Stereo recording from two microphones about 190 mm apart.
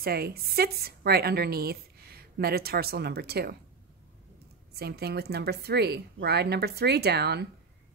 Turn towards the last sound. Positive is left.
turn(degrees=-60)  # may be behind; listen again after turning